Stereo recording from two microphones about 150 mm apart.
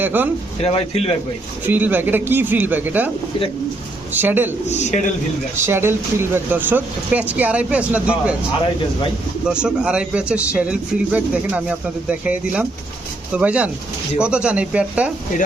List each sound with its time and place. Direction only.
0.0 s speech: 10° right (ahead or behind)
0.6 s a man's voice: 40° left (ahead or behind)
1.6 s speech: 10° right (ahead or behind)
4.1 s speech: 15° right (ahead or behind)
4.7 s a man's voice: 50° left (ahead or behind)
5.6 s speech: 15° right (ahead or behind)
9.5 s speech: 5° right (ahead or behind)